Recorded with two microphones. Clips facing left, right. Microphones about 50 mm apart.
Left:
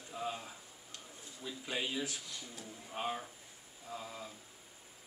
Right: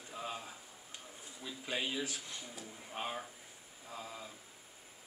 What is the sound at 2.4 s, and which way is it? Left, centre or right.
Mantra, centre.